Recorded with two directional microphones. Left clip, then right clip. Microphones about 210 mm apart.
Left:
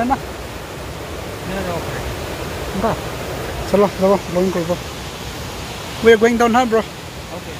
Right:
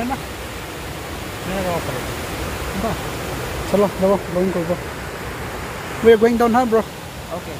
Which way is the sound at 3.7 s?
10° left (ahead or behind).